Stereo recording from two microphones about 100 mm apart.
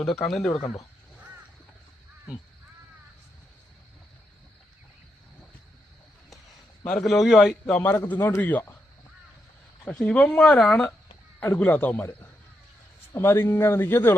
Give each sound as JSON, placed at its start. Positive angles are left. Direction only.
{"t": 0.1, "sound": "speech", "side_deg": 5}
{"t": 6.8, "sound": "speech", "side_deg": 10}
{"t": 7.7, "sound": "a man's voice", "side_deg": 15}
{"t": 9.8, "sound": "speech", "side_deg": 10}
{"t": 13.1, "sound": "a man's voice", "side_deg": 25}